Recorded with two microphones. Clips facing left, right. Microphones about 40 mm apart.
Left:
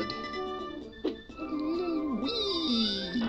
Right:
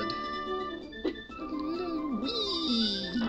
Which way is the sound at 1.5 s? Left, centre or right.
Centre.